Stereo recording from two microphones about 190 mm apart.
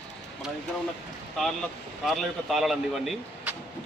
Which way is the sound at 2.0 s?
Centre (ahead or behind).